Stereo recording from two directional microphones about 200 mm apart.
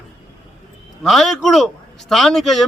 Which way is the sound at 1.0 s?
Centre (ahead or behind).